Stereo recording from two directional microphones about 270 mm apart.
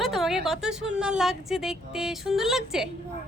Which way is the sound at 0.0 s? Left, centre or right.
Centre.